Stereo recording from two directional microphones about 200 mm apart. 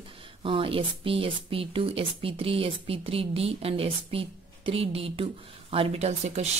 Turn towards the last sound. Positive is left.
turn(degrees=-30)  # may be behind; listen again after turning